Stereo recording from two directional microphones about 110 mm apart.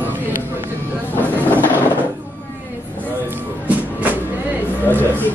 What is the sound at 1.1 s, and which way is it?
Speech, 15° left (ahead or behind).